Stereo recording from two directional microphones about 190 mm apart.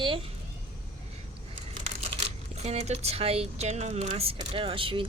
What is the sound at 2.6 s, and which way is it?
Speech, 35° right (ahead or behind).